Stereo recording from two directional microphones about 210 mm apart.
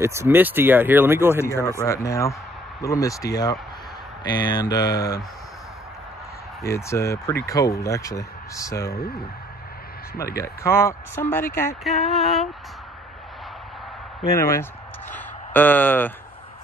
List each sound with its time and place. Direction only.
0.0 s speech: 15° right (ahead or behind)
1.4 s speech: 15° left (ahead or behind)
6.6 s speech: 15° left (ahead or behind)
10.1 s speech: 45° left (ahead or behind)
10.4 s speech: 10° left (ahead or behind)
11.8 s a sound: centre (ahead or behind)
14.3 s speech: 10° left (ahead or behind)